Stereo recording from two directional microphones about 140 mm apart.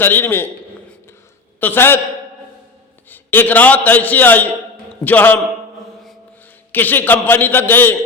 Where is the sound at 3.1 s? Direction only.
15° left (ahead or behind).